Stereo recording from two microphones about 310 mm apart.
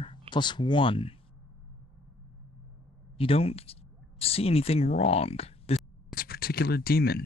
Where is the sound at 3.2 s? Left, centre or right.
Centre.